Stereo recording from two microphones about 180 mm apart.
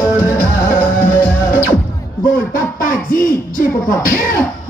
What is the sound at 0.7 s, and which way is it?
Music, 50° left (ahead or behind).